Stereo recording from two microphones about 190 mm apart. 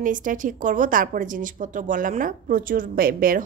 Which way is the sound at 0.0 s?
45° right (ahead or behind).